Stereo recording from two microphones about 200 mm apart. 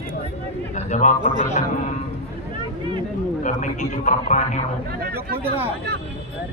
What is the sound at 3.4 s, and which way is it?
A man's voice, 40° left (ahead or behind).